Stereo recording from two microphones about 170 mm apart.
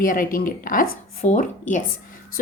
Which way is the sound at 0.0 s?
55° left (ahead or behind).